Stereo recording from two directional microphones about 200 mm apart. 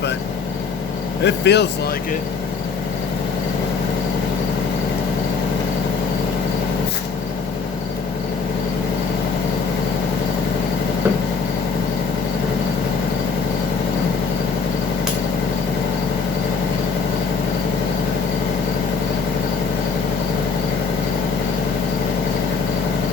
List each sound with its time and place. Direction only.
1.2 s a man's voice: 60° left (ahead or behind)